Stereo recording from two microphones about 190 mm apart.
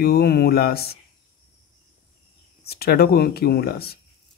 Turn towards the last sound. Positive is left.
turn(degrees=55)  # may be behind; listen again after turning